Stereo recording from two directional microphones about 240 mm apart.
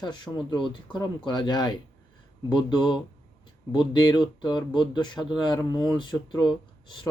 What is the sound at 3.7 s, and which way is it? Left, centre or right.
Speech, centre.